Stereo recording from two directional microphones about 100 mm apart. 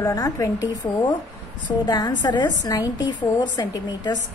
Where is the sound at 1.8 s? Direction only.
40° left (ahead or behind).